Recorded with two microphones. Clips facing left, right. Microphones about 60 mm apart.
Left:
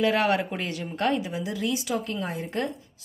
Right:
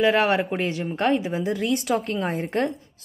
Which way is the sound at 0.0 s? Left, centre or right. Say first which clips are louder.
Right 3 dB; right.